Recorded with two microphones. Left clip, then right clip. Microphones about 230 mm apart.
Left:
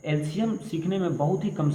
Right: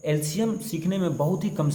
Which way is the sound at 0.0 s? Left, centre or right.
Right.